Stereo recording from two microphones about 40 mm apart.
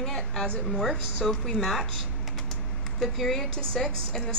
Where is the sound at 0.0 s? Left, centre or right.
Centre.